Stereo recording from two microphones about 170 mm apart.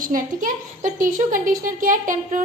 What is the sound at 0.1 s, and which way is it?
A woman's voice, 50° right (ahead or behind).